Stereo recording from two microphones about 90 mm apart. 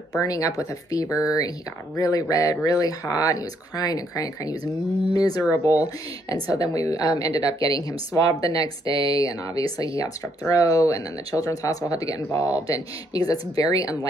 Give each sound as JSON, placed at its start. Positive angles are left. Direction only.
{"t": 0.2, "sound": "speech", "side_deg": 40}